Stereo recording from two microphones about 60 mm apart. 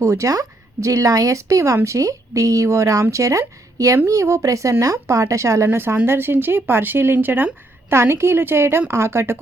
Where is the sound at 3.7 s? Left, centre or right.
Right.